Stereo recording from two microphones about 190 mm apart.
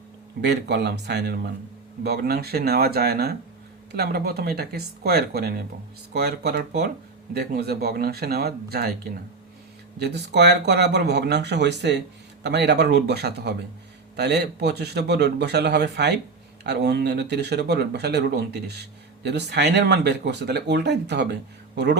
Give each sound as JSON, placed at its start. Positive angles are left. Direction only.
{"t": 0.4, "sound": "speech", "side_deg": -60}
{"t": 10.0, "sound": "speech", "side_deg": -60}